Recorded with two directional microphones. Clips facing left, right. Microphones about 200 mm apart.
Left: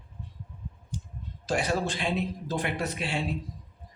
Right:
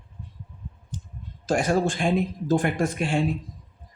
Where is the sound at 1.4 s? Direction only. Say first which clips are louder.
Right 6 dB; 50° right (ahead or behind).